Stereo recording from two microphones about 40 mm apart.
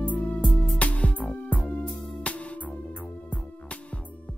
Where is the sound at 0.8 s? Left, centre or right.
Left.